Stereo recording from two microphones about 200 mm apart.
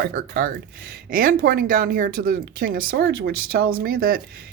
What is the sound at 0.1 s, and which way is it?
Speech, 40° right (ahead or behind).